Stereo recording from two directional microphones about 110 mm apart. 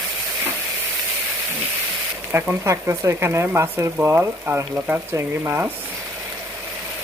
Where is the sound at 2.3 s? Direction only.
25° right (ahead or behind).